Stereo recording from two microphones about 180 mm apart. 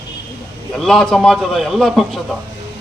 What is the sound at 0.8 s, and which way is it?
A man's voice, centre (ahead or behind).